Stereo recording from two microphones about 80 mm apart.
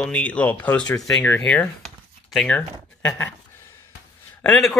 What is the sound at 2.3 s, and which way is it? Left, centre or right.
Speech, centre.